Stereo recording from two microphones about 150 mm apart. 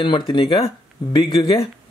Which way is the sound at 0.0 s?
30° left (ahead or behind).